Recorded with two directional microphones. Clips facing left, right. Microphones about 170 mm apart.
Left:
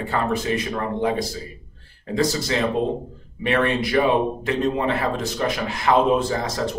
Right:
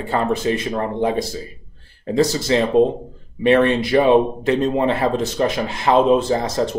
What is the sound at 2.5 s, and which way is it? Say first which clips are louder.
Speech: right 6 dB; 30° right (ahead or behind).